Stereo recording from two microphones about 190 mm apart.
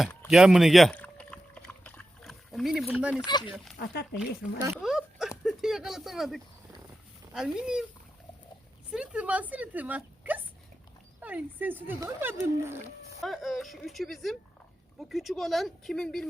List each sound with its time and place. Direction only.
0.0 s speech: 5° left (ahead or behind)
0.3 s rowboat: centre (ahead or behind)
3.2 s speech: 25° left (ahead or behind)
3.5 s speech: centre (ahead or behind)
4.2 s speech: 15° right (ahead or behind)
4.8 s a sound: centre (ahead or behind)
5.4 s speech: centre (ahead or behind)
8.9 s a woman's voice: 5° right (ahead or behind)
13.1 s speech: centre (ahead or behind)